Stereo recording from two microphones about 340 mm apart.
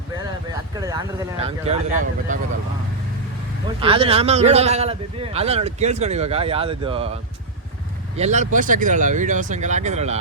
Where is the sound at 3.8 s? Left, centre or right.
Centre.